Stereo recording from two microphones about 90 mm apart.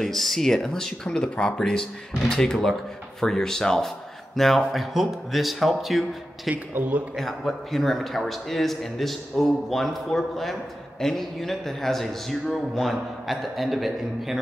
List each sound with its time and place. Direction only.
0.0 s a man's voice: 5° left (ahead or behind)
6.5 s a man's voice: 20° right (ahead or behind)
7.2 s a man's voice: centre (ahead or behind)